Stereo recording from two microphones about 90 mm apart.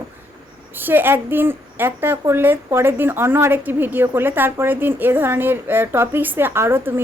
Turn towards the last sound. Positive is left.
turn(degrees=-25)  # may be behind; listen again after turning